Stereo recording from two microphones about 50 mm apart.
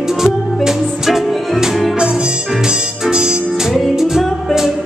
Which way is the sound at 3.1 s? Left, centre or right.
Centre.